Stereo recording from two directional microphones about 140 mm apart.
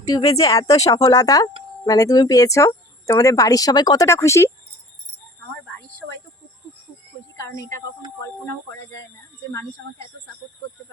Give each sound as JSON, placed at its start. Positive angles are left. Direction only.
{"t": 0.3, "sound": "speech", "side_deg": 25}
{"t": 7.3, "sound": "speech", "side_deg": 25}